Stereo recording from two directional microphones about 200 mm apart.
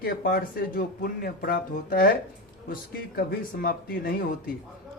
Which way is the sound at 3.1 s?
50° left (ahead or behind).